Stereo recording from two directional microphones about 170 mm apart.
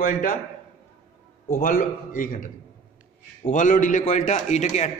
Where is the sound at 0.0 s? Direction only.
55° left (ahead or behind).